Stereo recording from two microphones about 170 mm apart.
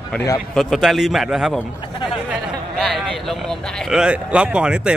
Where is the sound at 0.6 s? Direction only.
Centre (ahead or behind).